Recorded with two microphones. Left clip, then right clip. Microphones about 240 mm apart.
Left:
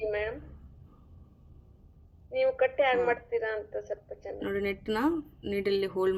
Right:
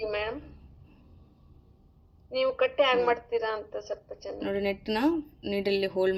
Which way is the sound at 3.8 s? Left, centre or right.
Right.